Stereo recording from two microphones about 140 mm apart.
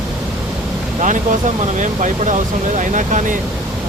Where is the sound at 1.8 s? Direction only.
60° right (ahead or behind).